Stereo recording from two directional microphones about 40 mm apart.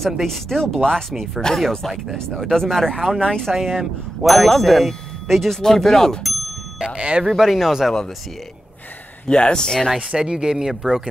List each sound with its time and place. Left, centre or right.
0.0 s speech: centre
3.5 s speech: centre
6.8 s speech: right
7.2 s speech: centre
9.3 s speech: left
10.1 s speech: centre